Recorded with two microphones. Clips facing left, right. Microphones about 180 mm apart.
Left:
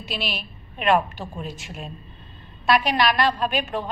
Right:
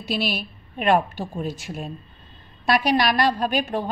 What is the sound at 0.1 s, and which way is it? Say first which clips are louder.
A woman's voice: right 6 dB; 40° right (ahead or behind).